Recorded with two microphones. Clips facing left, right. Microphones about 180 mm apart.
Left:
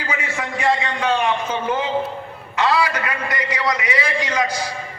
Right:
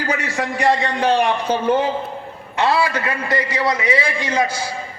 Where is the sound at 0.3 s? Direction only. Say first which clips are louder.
Right 2 dB; 40° right (ahead or behind).